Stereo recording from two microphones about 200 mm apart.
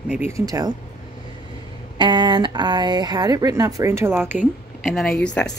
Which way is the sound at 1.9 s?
25° right (ahead or behind).